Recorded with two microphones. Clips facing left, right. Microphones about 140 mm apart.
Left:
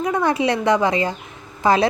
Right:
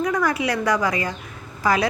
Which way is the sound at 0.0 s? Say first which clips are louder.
Left 3 dB; 25° left (ahead or behind).